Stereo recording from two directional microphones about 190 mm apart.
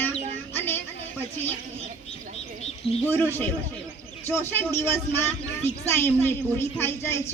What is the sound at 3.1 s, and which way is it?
A woman's voice, 10° left (ahead or behind).